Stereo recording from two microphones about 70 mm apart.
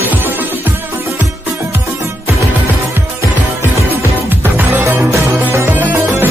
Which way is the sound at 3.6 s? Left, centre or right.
Right.